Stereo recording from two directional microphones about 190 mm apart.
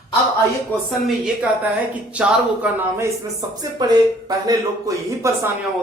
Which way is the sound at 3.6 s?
20° right (ahead or behind).